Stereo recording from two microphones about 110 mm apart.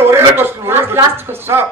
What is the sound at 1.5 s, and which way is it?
Speech, 30° right (ahead or behind).